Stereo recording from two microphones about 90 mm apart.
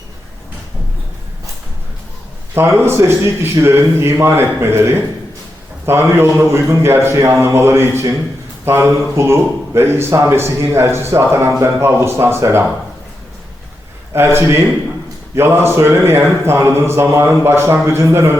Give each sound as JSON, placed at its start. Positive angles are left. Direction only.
{"t": 2.6, "sound": "a man's voice", "side_deg": -30}
{"t": 14.1, "sound": "a man's voice", "side_deg": -30}